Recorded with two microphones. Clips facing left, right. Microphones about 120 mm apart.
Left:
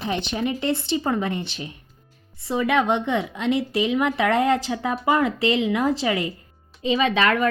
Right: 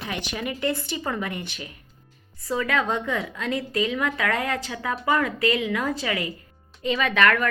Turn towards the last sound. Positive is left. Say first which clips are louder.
# left 2 dB
turn(degrees=20)  # may be behind; listen again after turning